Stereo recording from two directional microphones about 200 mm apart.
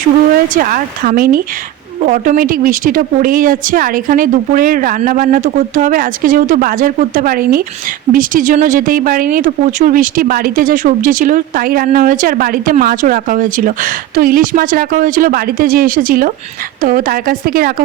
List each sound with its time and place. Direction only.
0.5 s speech: 45° right (ahead or behind)